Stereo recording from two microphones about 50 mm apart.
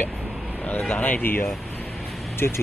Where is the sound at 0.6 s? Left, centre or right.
Left.